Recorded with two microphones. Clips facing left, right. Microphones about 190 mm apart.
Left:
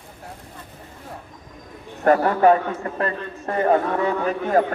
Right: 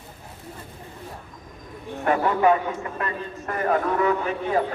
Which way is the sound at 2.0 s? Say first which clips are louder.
Left 4 dB; 40° left (ahead or behind).